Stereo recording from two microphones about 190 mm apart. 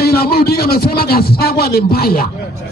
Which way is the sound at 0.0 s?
55° left (ahead or behind).